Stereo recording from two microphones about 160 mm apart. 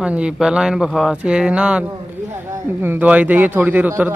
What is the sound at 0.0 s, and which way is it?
A man's voice, 5° right (ahead or behind).